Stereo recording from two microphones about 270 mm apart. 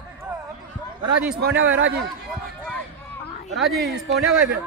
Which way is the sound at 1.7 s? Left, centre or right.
Right.